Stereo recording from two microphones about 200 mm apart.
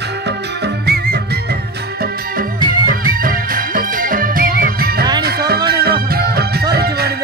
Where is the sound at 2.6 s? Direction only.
45° right (ahead or behind).